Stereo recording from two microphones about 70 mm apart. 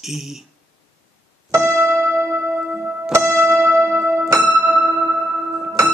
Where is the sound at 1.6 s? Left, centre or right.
Right.